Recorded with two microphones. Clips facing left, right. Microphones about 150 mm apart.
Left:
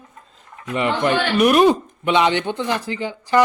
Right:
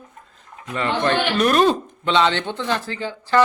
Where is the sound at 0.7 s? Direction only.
15° left (ahead or behind).